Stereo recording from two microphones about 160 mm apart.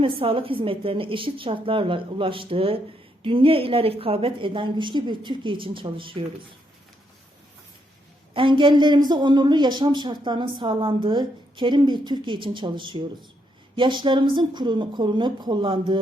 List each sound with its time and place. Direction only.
0.0 s a woman's voice: 35° right (ahead or behind)
8.3 s a woman's voice: 30° right (ahead or behind)